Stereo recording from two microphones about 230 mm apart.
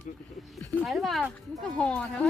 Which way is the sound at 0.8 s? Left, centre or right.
Centre.